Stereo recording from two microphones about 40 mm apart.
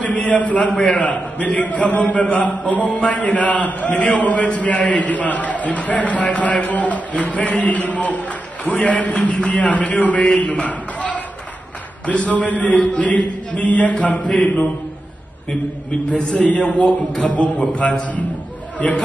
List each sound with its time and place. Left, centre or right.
0.0 s a man's voice: left
16.1 s a man's voice: left
18.8 s a man's voice: left